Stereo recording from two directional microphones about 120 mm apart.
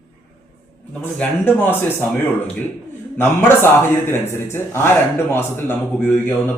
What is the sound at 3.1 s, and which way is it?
A man's voice, 20° left (ahead or behind).